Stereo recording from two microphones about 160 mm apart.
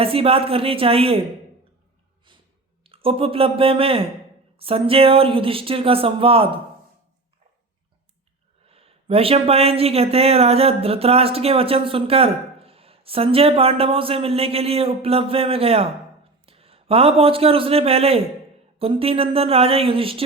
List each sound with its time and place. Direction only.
0.0 s speech: 35° right (ahead or behind)
2.8 s speech: 35° right (ahead or behind)
8.6 s a man's voice: 40° right (ahead or behind)